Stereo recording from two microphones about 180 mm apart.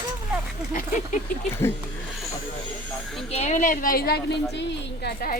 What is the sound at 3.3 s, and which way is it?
Speech, 35° left (ahead or behind).